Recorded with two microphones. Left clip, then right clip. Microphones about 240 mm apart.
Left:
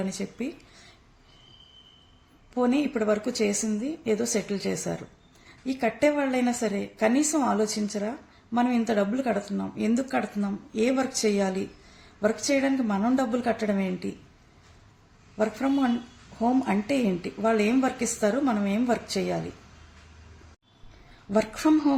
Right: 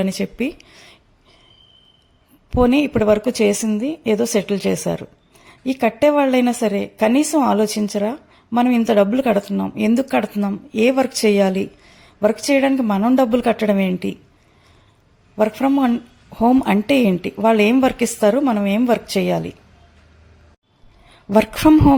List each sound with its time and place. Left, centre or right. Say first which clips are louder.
0.0 s speech: right 11 dB; right
2.5 s speech: right 10 dB; right
15.4 s speech: right 9 dB; right
21.1 s speech: right 10 dB; right